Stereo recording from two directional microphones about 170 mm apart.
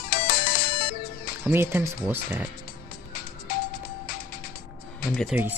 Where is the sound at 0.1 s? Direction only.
60° left (ahead or behind).